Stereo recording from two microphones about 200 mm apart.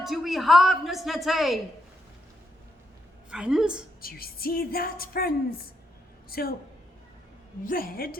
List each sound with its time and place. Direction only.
0.0 s a woman's voice: centre (ahead or behind)
3.2 s a woman's voice: 5° right (ahead or behind)
4.0 s a woman's voice: 50° left (ahead or behind)
7.6 s a woman's voice: 45° left (ahead or behind)